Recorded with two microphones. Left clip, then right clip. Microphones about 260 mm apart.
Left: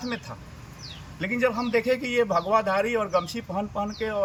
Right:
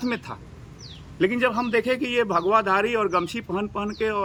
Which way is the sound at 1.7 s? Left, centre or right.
Right.